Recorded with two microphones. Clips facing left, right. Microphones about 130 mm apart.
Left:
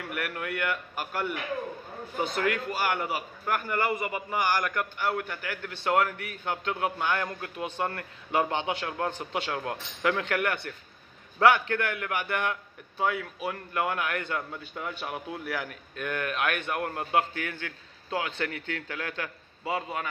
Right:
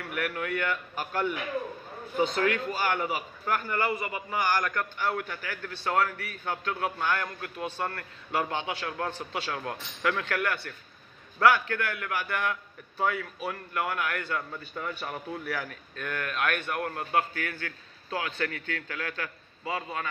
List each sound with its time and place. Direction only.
0.1 s a man's voice: 5° left (ahead or behind)
2.3 s a man's voice: 5° left (ahead or behind)